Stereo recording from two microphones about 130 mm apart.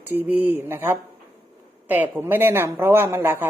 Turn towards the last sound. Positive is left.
turn(degrees=-15)  # may be behind; listen again after turning